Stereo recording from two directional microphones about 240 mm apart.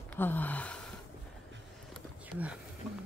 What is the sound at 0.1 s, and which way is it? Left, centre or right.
Gasp, centre.